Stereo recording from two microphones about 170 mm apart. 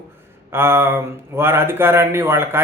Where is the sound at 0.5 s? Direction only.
15° right (ahead or behind).